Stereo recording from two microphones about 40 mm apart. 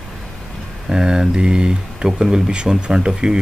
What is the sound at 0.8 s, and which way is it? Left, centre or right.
Speech, centre.